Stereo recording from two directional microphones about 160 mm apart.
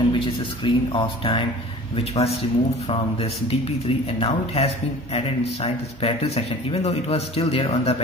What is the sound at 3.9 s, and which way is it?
A man's voice, 35° left (ahead or behind).